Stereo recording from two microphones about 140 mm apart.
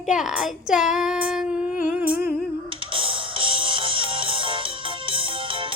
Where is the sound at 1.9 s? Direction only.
10° right (ahead or behind).